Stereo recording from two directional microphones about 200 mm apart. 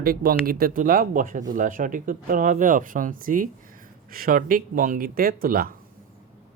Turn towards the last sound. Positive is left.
turn(degrees=-45)  # may be behind; listen again after turning